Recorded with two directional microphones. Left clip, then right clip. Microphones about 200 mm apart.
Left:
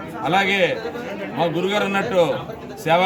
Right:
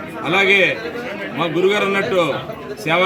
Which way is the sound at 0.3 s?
25° left (ahead or behind).